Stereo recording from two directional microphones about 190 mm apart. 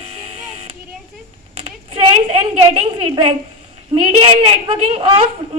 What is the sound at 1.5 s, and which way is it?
A woman's voice, 30° right (ahead or behind).